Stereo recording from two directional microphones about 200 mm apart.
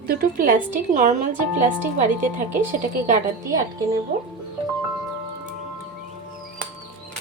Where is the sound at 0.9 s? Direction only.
40° right (ahead or behind).